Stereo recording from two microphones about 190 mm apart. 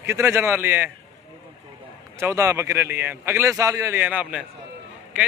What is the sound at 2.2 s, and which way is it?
A man's voice, 15° right (ahead or behind).